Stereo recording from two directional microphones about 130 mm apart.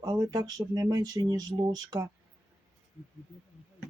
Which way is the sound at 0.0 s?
30° right (ahead or behind).